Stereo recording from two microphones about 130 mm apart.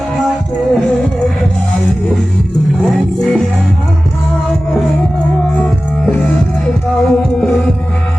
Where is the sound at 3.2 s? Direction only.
5° left (ahead or behind).